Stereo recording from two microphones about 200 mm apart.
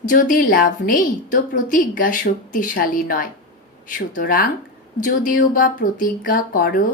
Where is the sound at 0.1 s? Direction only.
45° left (ahead or behind).